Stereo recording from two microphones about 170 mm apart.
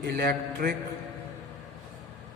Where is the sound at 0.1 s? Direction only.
65° right (ahead or behind).